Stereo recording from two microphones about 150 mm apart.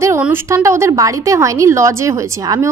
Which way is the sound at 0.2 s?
15° right (ahead or behind).